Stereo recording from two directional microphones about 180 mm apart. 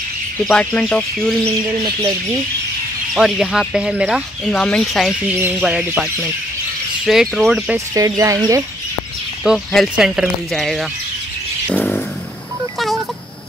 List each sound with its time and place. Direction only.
0.5 s speech: 5° left (ahead or behind)
1.8 s speech: 20° right (ahead or behind)
3.2 s speech: centre (ahead or behind)
4.5 s speech: 5° left (ahead or behind)
5.3 s speech: 5° right (ahead or behind)
7.1 s speech: centre (ahead or behind)
7.9 s speech: 20° right (ahead or behind)
9.4 s speech: centre (ahead or behind)
11.7 s vehicle: 5° left (ahead or behind)
12.7 s a sound: centre (ahead or behind)